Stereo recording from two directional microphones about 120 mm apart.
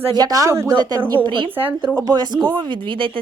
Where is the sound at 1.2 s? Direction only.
40° right (ahead or behind).